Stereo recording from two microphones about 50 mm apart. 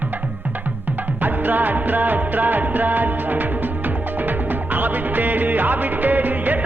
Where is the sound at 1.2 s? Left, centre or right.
Right.